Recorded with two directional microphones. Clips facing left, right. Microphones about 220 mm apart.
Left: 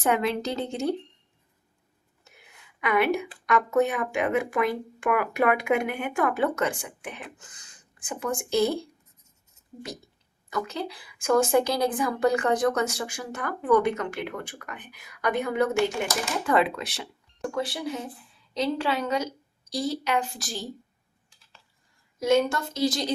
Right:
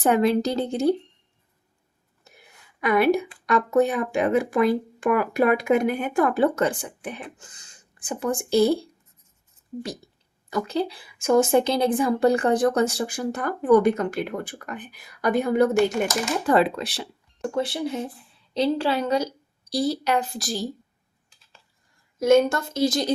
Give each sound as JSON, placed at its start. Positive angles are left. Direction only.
{"t": 0.0, "sound": "speech", "side_deg": -35}
{"t": 2.2, "sound": "a sound", "side_deg": -35}
{"t": 3.4, "sound": "speech", "side_deg": -35}
{"t": 10.5, "sound": "speech", "side_deg": -30}
{"t": 22.2, "sound": "a woman's voice", "side_deg": -45}